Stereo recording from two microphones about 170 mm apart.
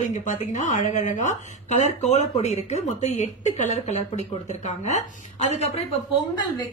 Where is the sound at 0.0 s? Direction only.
45° left (ahead or behind).